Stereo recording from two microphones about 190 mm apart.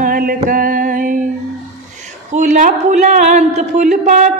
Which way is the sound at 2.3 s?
40° right (ahead or behind).